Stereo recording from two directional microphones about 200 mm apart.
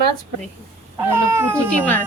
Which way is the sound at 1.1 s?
10° right (ahead or behind).